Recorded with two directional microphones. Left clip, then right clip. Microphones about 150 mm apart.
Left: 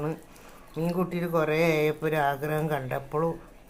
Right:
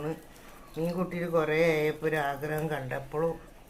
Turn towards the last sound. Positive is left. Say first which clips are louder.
# left 3 dB
turn(degrees=20)  # may be behind; listen again after turning